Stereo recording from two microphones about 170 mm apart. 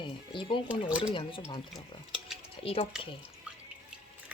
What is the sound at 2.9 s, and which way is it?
Speech, 5° right (ahead or behind).